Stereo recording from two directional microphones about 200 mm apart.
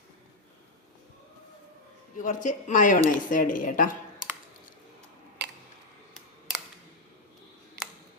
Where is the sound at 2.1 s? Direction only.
40° left (ahead or behind).